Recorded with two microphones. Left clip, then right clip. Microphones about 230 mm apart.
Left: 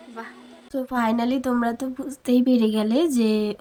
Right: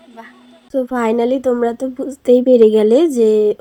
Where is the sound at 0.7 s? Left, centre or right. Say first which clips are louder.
Right 8 dB; left.